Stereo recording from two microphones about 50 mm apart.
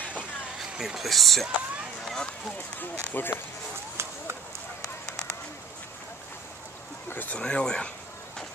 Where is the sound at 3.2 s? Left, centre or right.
Left.